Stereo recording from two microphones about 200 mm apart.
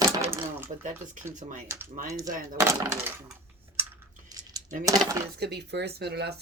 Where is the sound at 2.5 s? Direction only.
15° right (ahead or behind).